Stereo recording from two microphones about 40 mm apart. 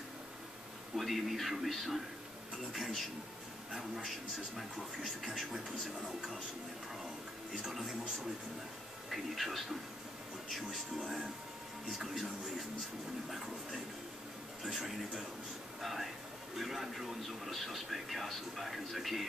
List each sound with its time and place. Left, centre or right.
0.9 s speech: centre
7.5 s speech: centre
9.1 s speech: centre
12.0 s speech: centre
14.6 s speech: centre